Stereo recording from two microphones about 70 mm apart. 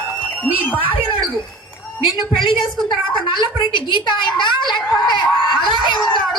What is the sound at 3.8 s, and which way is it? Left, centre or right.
A woman's voice, left.